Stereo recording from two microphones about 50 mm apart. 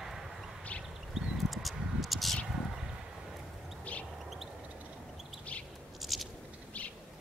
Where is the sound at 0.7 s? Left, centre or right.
Left.